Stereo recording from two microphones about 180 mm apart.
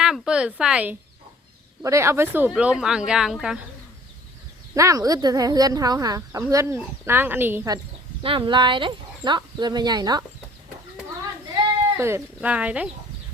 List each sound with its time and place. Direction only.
0.0 s a sound: 5° right (ahead or behind)
1.8 s speech: 15° right (ahead or behind)
4.7 s speech: 15° right (ahead or behind)
8.2 s speech: 30° right (ahead or behind)
11.9 s speech: 15° right (ahead or behind)